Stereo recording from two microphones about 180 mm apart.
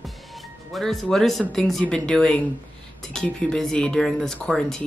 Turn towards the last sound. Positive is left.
turn(degrees=0)  # may be behind; listen again after turning